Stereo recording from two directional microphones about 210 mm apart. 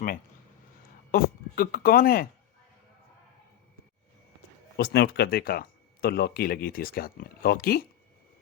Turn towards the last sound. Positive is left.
turn(degrees=45)  # may be behind; listen again after turning